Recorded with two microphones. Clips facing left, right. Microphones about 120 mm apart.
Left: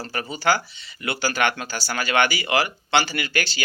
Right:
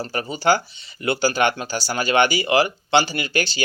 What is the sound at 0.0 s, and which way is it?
Speech, 25° right (ahead or behind).